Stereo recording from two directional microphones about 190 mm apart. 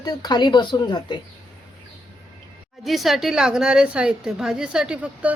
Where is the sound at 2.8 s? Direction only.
Centre (ahead or behind).